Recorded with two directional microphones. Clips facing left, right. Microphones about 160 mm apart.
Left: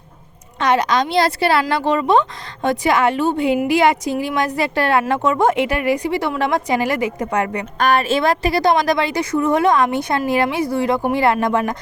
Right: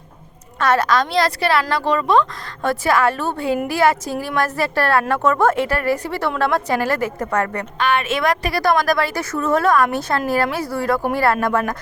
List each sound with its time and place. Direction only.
0.6 s a woman's voice: 20° left (ahead or behind)
7.8 s a woman's voice: 40° left (ahead or behind); by 11.8 s 15° left (ahead or behind)